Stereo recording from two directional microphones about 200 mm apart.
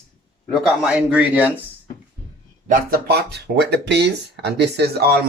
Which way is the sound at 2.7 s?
50° right (ahead or behind).